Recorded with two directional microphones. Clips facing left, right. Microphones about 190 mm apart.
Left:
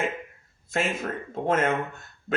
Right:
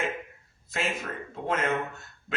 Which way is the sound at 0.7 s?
50° left (ahead or behind).